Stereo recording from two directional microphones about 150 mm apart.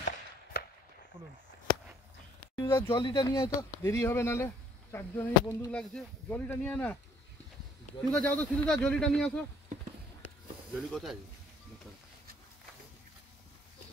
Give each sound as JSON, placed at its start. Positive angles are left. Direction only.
{"t": 0.5, "sound": "chop", "side_deg": 90}
{"t": 2.5, "sound": "speech", "side_deg": 30}
{"t": 5.7, "sound": "speech", "side_deg": 5}
{"t": 8.1, "sound": "speech", "side_deg": 10}
{"t": 10.7, "sound": "speech", "side_deg": 0}